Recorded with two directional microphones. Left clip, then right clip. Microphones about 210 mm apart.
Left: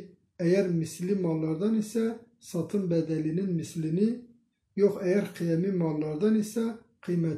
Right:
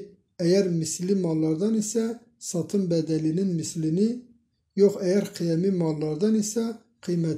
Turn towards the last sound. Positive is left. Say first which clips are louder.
# right 3 dB
turn(degrees=-40)  # may be behind; listen again after turning